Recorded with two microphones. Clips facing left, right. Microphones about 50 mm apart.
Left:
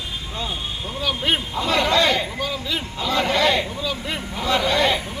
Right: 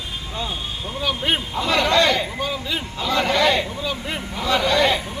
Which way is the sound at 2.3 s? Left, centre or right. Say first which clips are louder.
Right 1 dB; centre.